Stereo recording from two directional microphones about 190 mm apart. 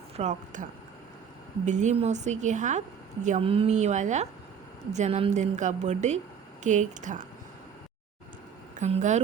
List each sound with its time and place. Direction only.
0.2 s a woman's voice: 40° right (ahead or behind)
8.7 s a woman's voice: 40° right (ahead or behind)